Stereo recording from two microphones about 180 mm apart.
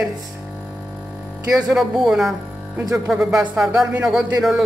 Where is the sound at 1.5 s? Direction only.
5° right (ahead or behind).